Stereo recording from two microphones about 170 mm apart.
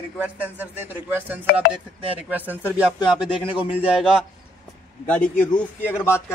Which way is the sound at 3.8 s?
5° right (ahead or behind).